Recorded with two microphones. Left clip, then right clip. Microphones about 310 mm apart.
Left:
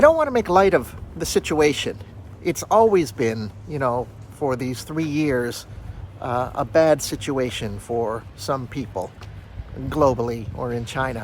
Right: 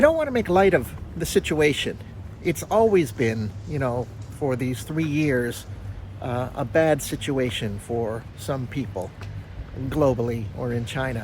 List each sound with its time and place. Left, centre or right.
0.0 s speech: centre